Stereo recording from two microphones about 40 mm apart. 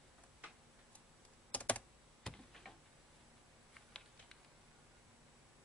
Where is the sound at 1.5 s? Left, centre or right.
Left.